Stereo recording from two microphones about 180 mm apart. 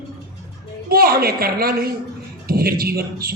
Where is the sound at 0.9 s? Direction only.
60° right (ahead or behind).